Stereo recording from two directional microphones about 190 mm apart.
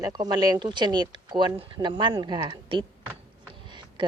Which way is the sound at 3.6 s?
25° right (ahead or behind).